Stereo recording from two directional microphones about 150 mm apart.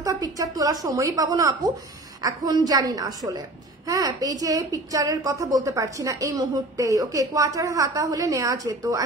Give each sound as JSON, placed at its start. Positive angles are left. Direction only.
{"t": 0.0, "sound": "a woman's voice", "side_deg": -25}